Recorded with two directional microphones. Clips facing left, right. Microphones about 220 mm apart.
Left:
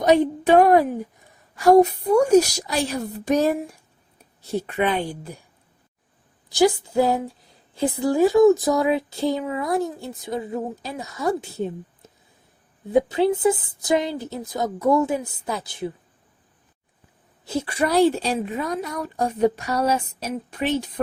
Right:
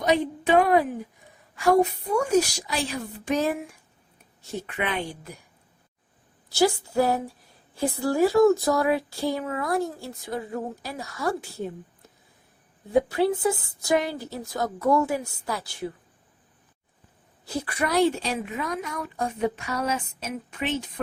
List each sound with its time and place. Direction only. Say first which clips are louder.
0.0 s a woman's voice: left 6 dB; 45° left (ahead or behind)
6.5 s speech: left 4 dB; 15° left (ahead or behind)
12.9 s speech: left 3 dB; 20° left (ahead or behind)
17.4 s a woman's voice: left 5 dB; 25° left (ahead or behind)